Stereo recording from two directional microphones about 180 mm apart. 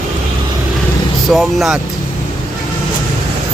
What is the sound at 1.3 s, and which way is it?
Speech, centre (ahead or behind).